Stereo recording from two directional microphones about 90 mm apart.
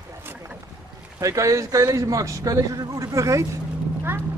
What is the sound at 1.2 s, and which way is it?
A man's voice, 35° right (ahead or behind).